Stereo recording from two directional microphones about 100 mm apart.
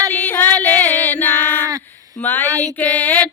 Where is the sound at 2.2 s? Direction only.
20° left (ahead or behind).